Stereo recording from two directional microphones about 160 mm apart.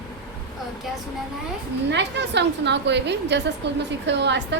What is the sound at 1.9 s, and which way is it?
A woman's voice, 90° right.